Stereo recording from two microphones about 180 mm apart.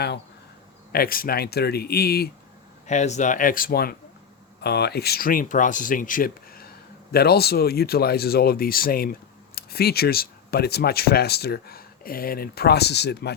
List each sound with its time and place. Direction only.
0.9 s speech: 55° left (ahead or behind)
2.8 s speech: 40° left (ahead or behind); by 13.3 s 70° left (ahead or behind)